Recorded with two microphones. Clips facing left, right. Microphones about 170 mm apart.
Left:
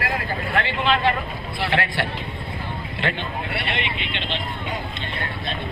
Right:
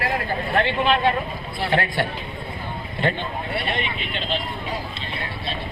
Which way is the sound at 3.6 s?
40° right (ahead or behind).